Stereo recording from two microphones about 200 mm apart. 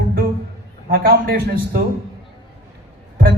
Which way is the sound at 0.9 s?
45° right (ahead or behind).